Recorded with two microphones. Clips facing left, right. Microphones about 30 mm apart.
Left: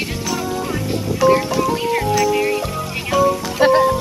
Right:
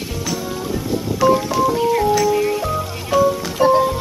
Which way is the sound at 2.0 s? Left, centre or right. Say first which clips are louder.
Even; centre.